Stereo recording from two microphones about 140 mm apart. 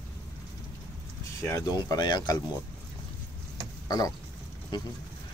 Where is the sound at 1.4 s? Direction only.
20° left (ahead or behind).